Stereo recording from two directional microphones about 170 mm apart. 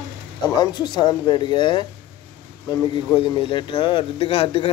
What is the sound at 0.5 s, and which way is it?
Speech, 25° left (ahead or behind).